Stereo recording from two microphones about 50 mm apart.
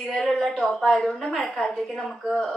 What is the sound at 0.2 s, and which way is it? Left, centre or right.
Speech, centre.